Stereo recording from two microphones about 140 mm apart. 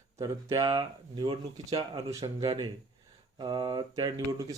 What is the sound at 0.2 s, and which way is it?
Speech, 25° right (ahead or behind).